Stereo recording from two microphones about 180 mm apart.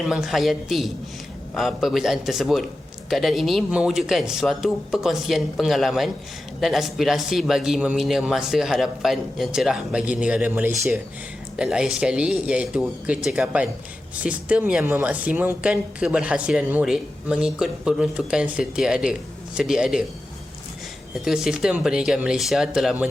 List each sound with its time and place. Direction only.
0.0 s speech: centre (ahead or behind)
21.2 s speech: 5° right (ahead or behind)